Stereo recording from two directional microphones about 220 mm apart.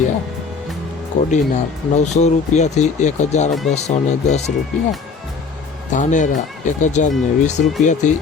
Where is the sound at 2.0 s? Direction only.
30° left (ahead or behind).